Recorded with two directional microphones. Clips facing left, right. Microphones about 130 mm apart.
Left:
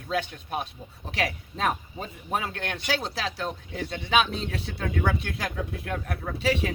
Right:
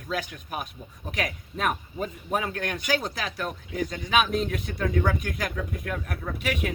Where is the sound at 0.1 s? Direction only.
30° left (ahead or behind).